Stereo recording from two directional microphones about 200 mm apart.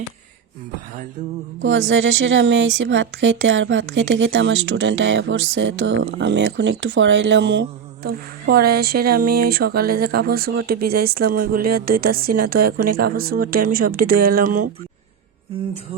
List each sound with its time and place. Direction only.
1.6 s a woman's voice: 70° right (ahead or behind); by 14.7 s 45° right (ahead or behind)